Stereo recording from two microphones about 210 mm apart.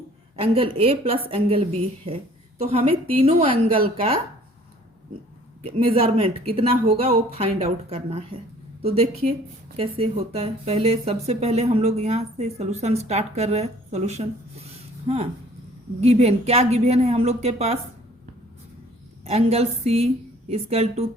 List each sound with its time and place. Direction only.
0.3 s speech: 25° right (ahead or behind)
5.6 s a woman's voice: 25° right (ahead or behind)
19.2 s a woman's voice: 30° right (ahead or behind)